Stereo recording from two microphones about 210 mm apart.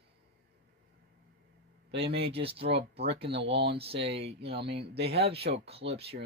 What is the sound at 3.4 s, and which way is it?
Speech, 55° right (ahead or behind).